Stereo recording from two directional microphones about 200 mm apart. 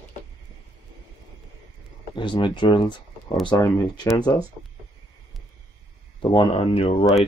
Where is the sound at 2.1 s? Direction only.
25° left (ahead or behind).